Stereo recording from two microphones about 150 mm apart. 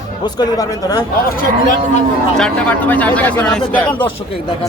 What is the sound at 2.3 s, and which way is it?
Speech, 5° left (ahead or behind).